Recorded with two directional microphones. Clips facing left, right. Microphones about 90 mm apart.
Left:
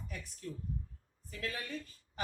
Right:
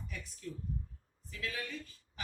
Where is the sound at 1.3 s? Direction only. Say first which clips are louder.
Even; 40° left (ahead or behind).